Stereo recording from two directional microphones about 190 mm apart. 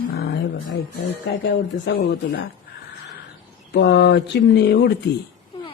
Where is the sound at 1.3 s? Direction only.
60° left (ahead or behind).